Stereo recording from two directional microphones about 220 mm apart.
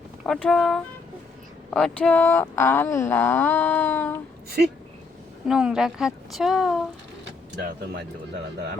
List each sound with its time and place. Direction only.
0.3 s a woman's voice: 5° left (ahead or behind)
5.5 s a woman's voice: 5° right (ahead or behind)
7.3 s vehicle: 50° right (ahead or behind)